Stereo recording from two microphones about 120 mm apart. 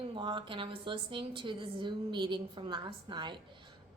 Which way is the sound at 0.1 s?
40° right (ahead or behind).